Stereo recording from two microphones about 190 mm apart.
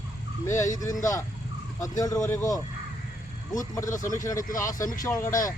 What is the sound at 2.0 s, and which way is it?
Speech, 15° left (ahead or behind).